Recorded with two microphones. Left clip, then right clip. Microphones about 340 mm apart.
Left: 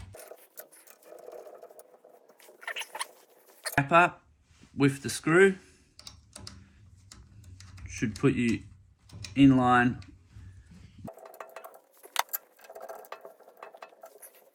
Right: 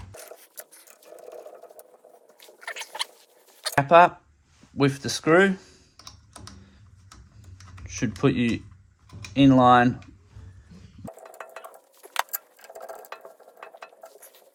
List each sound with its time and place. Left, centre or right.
0.1 s sewing machine: centre
3.8 s speech: right
7.9 s speech: right
11.0 s a sound: centre